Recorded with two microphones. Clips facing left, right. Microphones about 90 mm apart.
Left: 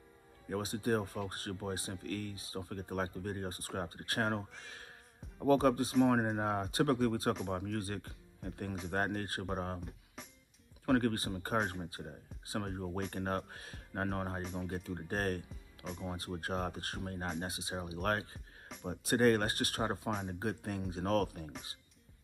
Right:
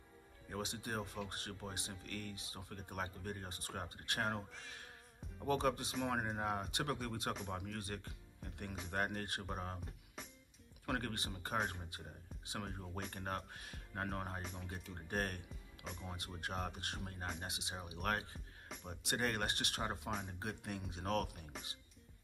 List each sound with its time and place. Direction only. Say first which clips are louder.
0.5 s speech: left 10 dB; 45° left (ahead or behind)
5.5 s speech: left 8 dB; 45° left (ahead or behind)
10.2 s music: even; centre (ahead or behind)
10.9 s speech: left 10 dB; 40° left (ahead or behind)
15.8 s speech: left 6 dB; centre (ahead or behind)
16.2 s speech: left 5 dB; 40° left (ahead or behind)